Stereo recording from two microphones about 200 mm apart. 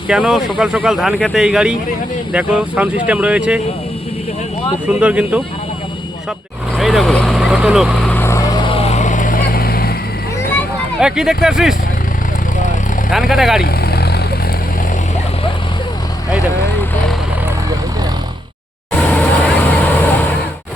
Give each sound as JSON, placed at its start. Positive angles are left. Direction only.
{"t": 0.1, "sound": "speech", "side_deg": -5}
{"t": 4.9, "sound": "speech", "side_deg": -5}
{"t": 6.7, "sound": "vehicle", "side_deg": 0}
{"t": 8.1, "sound": "vehicle", "side_deg": 15}
{"t": 11.0, "sound": "speech", "side_deg": -5}
{"t": 13.1, "sound": "speech", "side_deg": 0}
{"t": 13.6, "sound": "vehicle", "side_deg": 50}
{"t": 18.9, "sound": "vehicle", "side_deg": 10}